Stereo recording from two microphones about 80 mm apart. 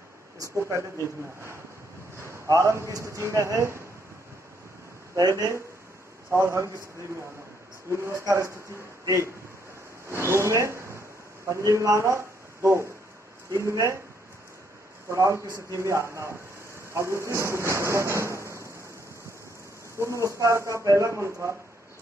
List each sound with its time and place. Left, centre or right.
0.4 s a man's voice: right
5.1 s a man's voice: right
7.9 s a man's voice: right
15.0 s a man's voice: right
20.0 s a man's voice: right